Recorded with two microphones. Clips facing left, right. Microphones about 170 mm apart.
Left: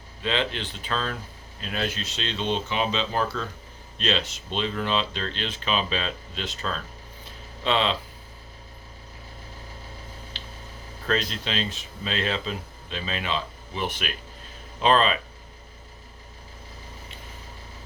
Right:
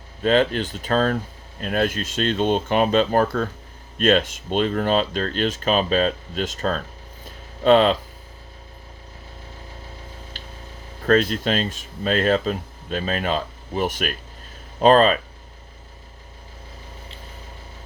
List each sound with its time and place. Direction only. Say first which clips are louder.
0.2 s speech: right 9 dB; 45° right (ahead or behind)
10.3 s a sound: right 2 dB; 45° right (ahead or behind)
11.0 s speech: right 9 dB; 45° right (ahead or behind)